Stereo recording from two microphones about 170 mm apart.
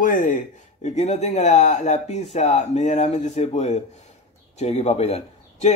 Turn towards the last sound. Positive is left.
turn(degrees=40)  # may be behind; listen again after turning